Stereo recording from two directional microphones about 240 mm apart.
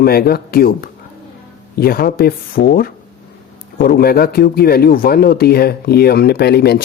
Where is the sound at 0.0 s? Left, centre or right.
Left.